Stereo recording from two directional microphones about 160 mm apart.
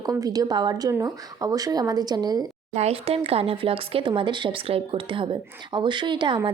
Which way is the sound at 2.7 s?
40° right (ahead or behind).